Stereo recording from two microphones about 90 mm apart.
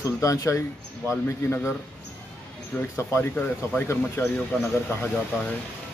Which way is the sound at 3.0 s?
30° left (ahead or behind).